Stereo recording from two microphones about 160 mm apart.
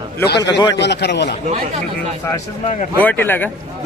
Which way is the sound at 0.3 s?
25° left (ahead or behind).